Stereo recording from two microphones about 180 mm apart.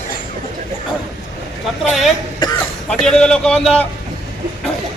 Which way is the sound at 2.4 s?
25° left (ahead or behind).